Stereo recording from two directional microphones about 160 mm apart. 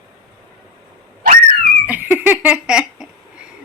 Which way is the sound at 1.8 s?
10° right (ahead or behind).